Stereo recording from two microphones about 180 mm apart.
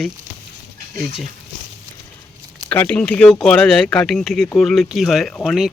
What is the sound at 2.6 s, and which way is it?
Speech, 10° left (ahead or behind).